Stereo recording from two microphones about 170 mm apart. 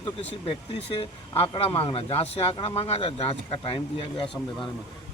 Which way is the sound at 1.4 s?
35° left (ahead or behind).